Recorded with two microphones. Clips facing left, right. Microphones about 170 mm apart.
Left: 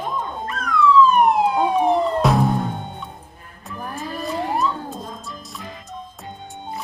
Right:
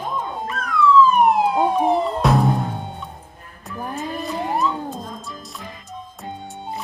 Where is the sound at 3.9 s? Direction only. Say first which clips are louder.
Right 3 dB; 20° right (ahead or behind).